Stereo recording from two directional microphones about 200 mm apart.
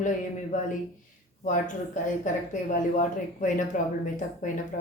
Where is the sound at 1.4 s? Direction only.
40° left (ahead or behind).